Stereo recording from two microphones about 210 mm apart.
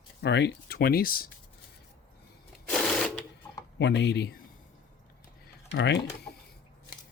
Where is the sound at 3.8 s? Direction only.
55° left (ahead or behind).